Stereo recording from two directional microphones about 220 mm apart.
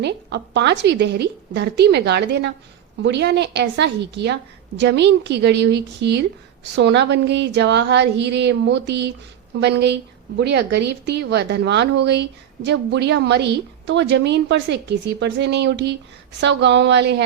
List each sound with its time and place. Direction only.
0.0 s a woman's voice: 50° right (ahead or behind)